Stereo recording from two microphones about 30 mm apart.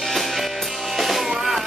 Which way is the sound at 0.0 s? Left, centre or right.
Centre.